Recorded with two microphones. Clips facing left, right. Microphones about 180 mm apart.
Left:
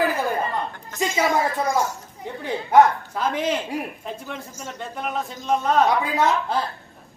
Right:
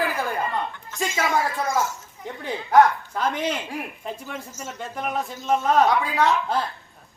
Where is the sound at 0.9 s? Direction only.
15° left (ahead or behind).